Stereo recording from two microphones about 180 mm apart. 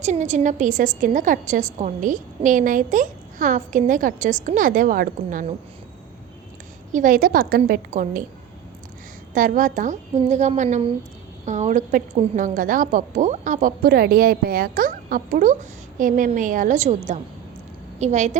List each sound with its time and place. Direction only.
0.0 s a woman's voice: 40° right (ahead or behind)
6.9 s a woman's voice: 50° right (ahead or behind)
9.3 s a woman's voice: 50° right (ahead or behind)